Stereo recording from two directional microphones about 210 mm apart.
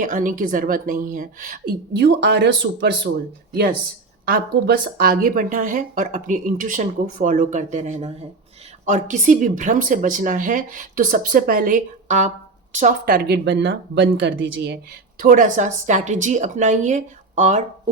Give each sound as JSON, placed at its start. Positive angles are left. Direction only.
{"t": 0.0, "sound": "a woman's voice", "side_deg": -40}
{"t": 1.9, "sound": "speech", "side_deg": -55}
{"t": 4.3, "sound": "a woman's voice", "side_deg": -50}
{"t": 15.2, "sound": "a woman's voice", "side_deg": -40}